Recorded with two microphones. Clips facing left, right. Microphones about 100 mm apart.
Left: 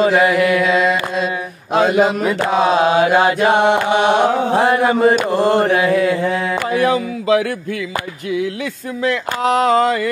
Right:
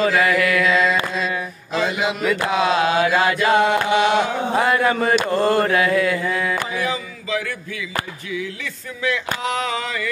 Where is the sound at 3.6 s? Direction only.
65° left (ahead or behind).